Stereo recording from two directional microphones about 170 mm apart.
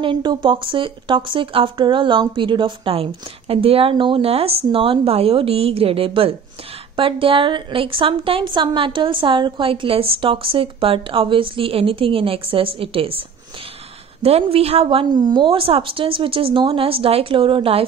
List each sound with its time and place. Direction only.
0.0 s speech: 25° right (ahead or behind)
14.2 s speech: 35° right (ahead or behind)